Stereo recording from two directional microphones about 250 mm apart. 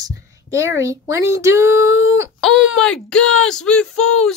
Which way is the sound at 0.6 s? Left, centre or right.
Centre.